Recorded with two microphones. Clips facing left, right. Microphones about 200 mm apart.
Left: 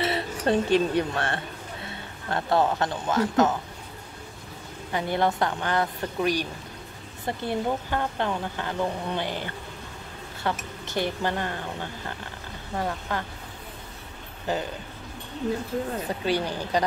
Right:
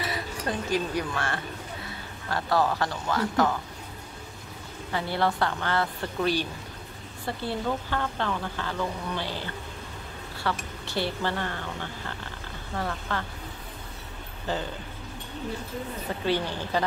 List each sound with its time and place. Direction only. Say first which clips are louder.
0.0 s speech: left 6 dB; 30° left (ahead or behind)
4.9 s a woman's voice: left 2 dB; 20° left (ahead or behind)
12.7 s speech: left 2 dB; 20° left (ahead or behind)
16.3 s a woman's voice: even; 15° left (ahead or behind)